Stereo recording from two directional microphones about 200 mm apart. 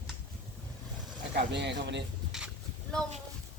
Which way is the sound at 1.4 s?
60° right (ahead or behind).